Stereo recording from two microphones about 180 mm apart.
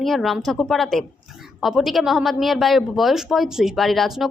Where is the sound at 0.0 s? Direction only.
Centre (ahead or behind).